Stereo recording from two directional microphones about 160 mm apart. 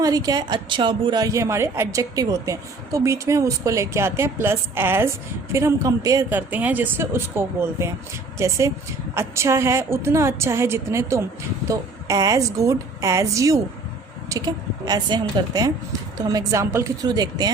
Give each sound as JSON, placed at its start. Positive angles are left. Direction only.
{"t": 0.0, "sound": "a woman's voice", "side_deg": -25}
{"t": 6.3, "sound": "a woman's voice", "side_deg": -10}